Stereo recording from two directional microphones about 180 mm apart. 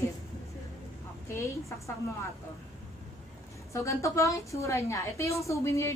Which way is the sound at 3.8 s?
15° left (ahead or behind).